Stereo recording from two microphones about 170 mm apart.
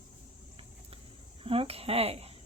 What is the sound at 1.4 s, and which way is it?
Speech, 35° right (ahead or behind).